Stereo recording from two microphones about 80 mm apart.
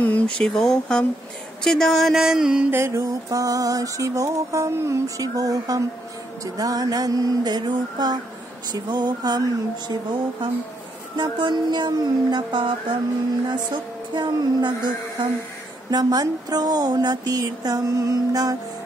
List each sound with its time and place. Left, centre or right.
0.0 s speech: centre
2.2 s mantra: centre
2.7 s mantra: right
8.7 s a woman's voice: right
11.1 s a sound: right
14.1 s a woman's voice: right
15.9 s a woman's voice: right